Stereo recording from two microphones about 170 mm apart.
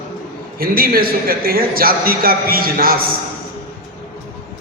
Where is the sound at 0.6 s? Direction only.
60° right (ahead or behind).